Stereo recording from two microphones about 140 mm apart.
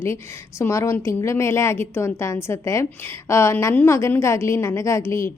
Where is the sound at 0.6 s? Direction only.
20° left (ahead or behind).